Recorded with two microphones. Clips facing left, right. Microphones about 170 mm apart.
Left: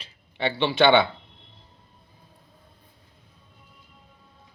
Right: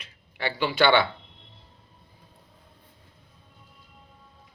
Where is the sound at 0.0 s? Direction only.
25° left (ahead or behind).